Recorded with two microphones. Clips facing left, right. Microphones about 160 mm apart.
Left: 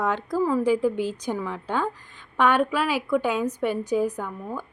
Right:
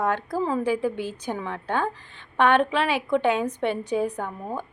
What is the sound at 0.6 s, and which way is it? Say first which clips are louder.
A woman's voice: left 3 dB; 15° left (ahead or behind).